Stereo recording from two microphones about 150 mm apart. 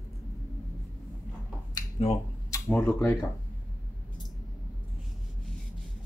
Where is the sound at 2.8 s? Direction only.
20° left (ahead or behind).